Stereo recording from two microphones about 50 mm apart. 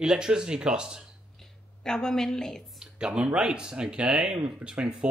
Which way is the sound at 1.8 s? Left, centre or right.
Centre.